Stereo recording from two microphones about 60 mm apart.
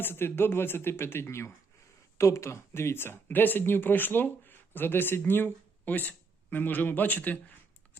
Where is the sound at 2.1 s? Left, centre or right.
Left.